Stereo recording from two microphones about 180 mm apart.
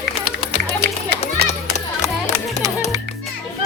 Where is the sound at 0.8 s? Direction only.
65° right (ahead or behind).